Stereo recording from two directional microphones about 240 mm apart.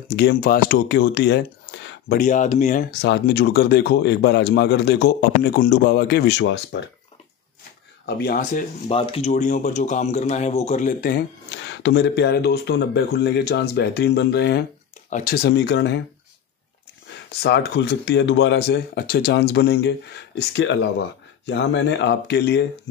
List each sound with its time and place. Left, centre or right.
0.1 s speech: left
2.1 s speech: left
3.0 s a man's voice: left
8.2 s a man's voice: left
17.4 s a man's voice: left